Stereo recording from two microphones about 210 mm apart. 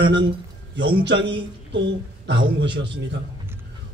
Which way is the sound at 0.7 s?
60° right (ahead or behind).